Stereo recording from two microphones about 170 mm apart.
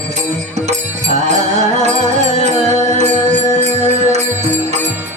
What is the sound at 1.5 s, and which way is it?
Music, 40° right (ahead or behind).